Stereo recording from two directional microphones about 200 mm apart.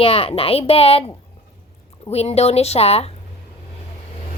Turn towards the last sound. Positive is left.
turn(degrees=30)  # may be behind; listen again after turning